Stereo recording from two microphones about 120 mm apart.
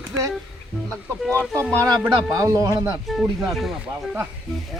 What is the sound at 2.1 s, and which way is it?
Speech, 30° right (ahead or behind).